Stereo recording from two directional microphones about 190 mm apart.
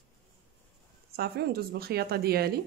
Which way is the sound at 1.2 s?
55° right (ahead or behind).